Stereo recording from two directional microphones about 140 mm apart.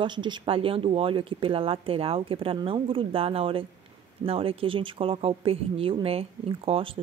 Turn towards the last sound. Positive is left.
turn(degrees=-40)  # may be behind; listen again after turning